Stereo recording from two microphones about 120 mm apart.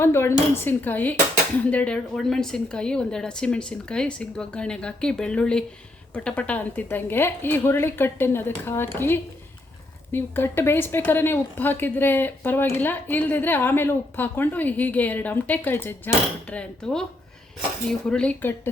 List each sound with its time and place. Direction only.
0.0 s speech: 20° left (ahead or behind)